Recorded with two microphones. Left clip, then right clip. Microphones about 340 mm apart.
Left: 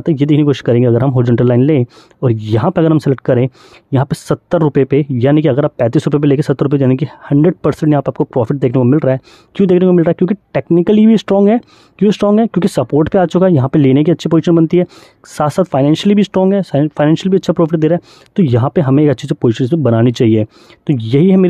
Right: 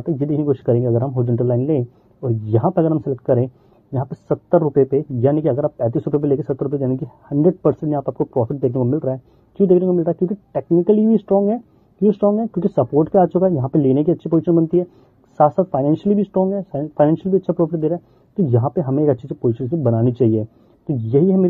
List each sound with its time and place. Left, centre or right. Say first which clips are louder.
0.0 s speech: left 8 dB; left